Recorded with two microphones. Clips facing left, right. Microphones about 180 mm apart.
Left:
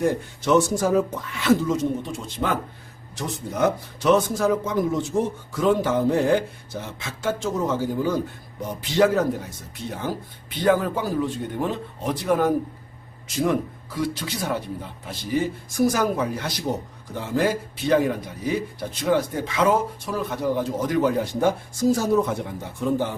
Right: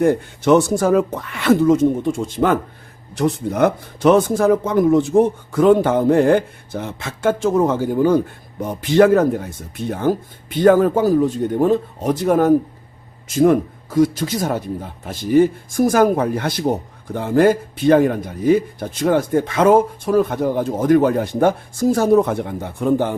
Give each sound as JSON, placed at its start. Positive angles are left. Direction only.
{"t": 0.0, "sound": "speech", "side_deg": -60}
{"t": 3.2, "sound": "speech", "side_deg": -60}